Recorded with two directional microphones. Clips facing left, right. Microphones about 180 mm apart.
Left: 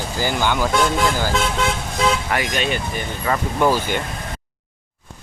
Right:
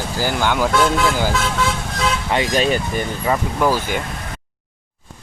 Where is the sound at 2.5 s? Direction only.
40° right (ahead or behind).